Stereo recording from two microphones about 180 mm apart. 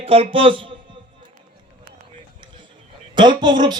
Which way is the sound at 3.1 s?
25° right (ahead or behind).